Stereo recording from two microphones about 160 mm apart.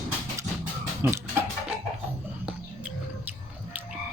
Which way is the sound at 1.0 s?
15° right (ahead or behind).